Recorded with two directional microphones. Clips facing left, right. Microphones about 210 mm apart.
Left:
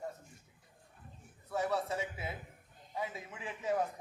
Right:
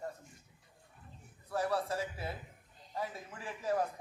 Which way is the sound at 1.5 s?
Centre (ahead or behind).